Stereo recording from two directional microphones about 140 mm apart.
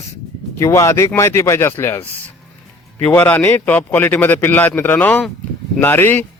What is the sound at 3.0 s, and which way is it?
A man's voice, 15° left (ahead or behind).